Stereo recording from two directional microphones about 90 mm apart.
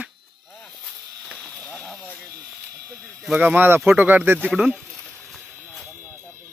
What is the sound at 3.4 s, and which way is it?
Speech, 20° right (ahead or behind).